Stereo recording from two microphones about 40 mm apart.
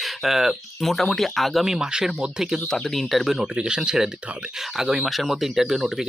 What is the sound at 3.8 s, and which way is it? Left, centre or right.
Speech, centre.